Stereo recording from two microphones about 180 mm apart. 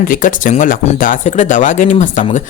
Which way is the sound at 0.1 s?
45° left (ahead or behind).